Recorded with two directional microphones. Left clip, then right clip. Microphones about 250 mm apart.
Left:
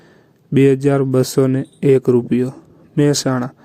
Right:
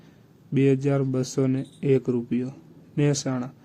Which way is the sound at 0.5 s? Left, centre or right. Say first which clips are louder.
Left 9 dB; left.